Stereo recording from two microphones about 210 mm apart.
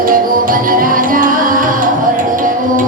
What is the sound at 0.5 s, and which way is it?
Music, 40° right (ahead or behind).